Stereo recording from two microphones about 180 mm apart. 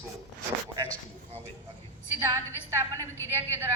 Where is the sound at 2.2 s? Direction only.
15° right (ahead or behind).